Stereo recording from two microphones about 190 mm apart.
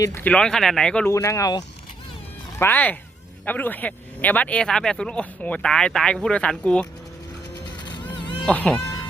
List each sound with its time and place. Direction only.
0.0 s speech: 10° left (ahead or behind)
1.1 s speech: 15° left (ahead or behind)
8.1 s a sound: 25° left (ahead or behind)
8.4 s speech: 10° left (ahead or behind)